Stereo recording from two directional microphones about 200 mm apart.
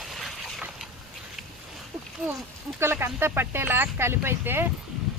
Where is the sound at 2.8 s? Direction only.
10° right (ahead or behind).